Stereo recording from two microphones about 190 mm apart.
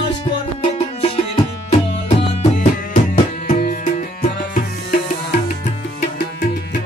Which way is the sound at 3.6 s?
40° left (ahead or behind).